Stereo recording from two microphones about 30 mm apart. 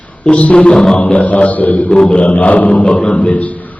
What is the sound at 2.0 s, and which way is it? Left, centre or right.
Speech, left.